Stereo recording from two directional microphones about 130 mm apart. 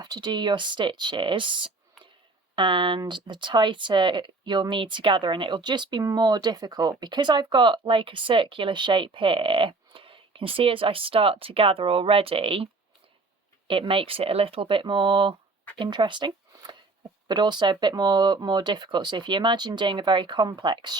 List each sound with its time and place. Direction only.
0.0 s speech: 30° right (ahead or behind)
13.7 s speech: 45° right (ahead or behind)